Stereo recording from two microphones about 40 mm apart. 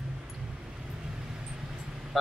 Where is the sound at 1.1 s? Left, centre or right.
Centre.